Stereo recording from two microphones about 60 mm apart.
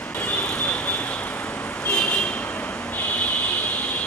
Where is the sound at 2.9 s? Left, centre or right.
Left.